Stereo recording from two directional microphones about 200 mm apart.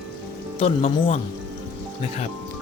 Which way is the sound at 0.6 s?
30° left (ahead or behind).